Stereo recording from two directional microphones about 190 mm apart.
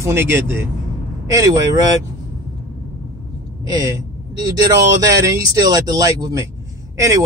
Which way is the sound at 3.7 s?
20° right (ahead or behind).